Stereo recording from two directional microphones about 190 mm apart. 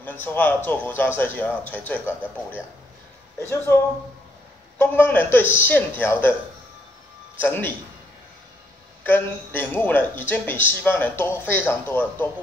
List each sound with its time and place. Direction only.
0.0 s speech: 10° left (ahead or behind)
3.3 s speech: 10° left (ahead or behind)
7.4 s speech: 10° left (ahead or behind)
9.0 s speech: 10° left (ahead or behind)